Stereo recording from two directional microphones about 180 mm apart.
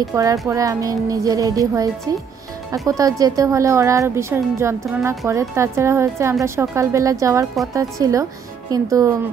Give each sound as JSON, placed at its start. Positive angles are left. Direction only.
{"t": 0.1, "sound": "a woman's voice", "side_deg": -15}